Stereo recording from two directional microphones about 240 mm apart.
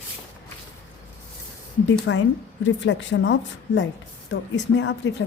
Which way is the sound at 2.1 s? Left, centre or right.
Left.